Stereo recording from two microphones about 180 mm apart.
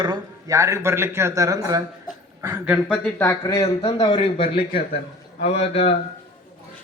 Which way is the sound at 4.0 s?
30° left (ahead or behind).